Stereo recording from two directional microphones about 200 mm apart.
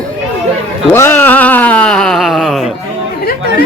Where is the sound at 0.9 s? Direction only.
10° left (ahead or behind).